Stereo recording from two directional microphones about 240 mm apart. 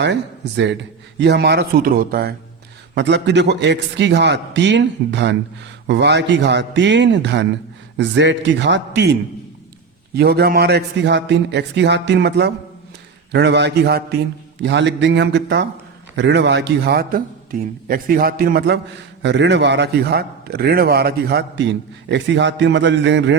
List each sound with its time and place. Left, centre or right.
0.0 s a man's voice: right
10.2 s a man's voice: right